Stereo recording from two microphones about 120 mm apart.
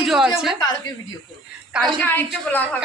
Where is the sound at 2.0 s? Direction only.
15° left (ahead or behind).